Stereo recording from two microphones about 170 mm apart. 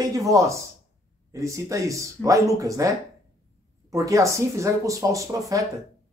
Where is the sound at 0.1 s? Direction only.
20° right (ahead or behind).